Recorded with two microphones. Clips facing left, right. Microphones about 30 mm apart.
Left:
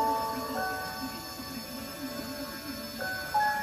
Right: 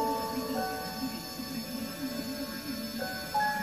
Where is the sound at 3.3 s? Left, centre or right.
Centre.